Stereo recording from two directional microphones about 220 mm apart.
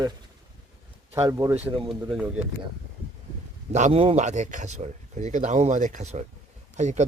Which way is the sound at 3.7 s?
30° right (ahead or behind).